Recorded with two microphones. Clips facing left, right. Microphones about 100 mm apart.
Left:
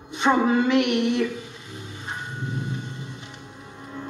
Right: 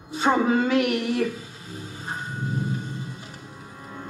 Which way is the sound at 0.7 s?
25° left (ahead or behind).